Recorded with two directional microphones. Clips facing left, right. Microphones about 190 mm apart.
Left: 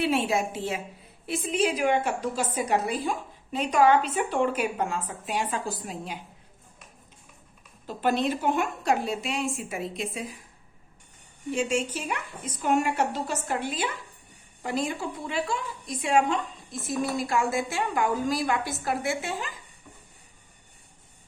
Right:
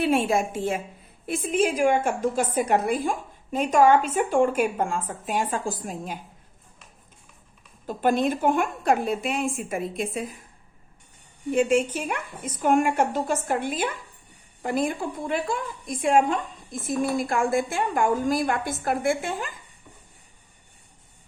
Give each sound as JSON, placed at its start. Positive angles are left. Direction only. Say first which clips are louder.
{"t": 0.0, "sound": "a woman's voice", "louder": "right 3 dB", "side_deg": -50}
{"t": 7.9, "sound": "a woman's voice", "louder": "right 3 dB", "side_deg": -50}
{"t": 11.5, "sound": "a woman's voice", "louder": "right 6 dB", "side_deg": -55}